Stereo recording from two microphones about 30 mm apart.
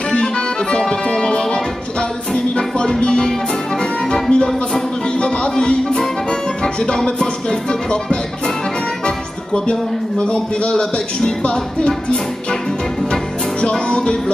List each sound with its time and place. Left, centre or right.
0.1 s accordion: left
1.1 s music: left
9.0 s speech: left
10.7 s music: left
13.6 s music: left